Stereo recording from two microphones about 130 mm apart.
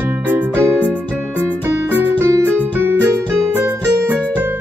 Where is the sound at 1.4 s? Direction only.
15° right (ahead or behind).